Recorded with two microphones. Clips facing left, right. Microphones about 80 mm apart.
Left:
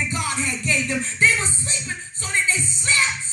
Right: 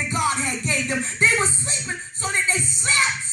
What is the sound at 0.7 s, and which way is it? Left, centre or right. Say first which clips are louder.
Music: left 2 dB; right.